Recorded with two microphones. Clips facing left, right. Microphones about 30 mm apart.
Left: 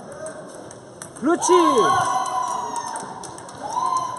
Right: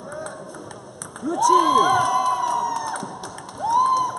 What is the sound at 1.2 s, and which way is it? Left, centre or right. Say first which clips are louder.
Speech: left 1 dB; left.